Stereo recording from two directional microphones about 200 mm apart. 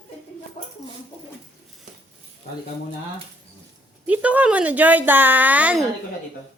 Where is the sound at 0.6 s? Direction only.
30° left (ahead or behind).